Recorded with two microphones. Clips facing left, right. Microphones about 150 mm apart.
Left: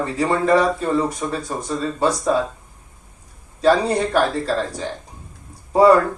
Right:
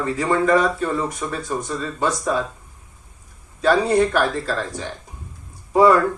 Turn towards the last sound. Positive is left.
turn(degrees=30)  # may be behind; listen again after turning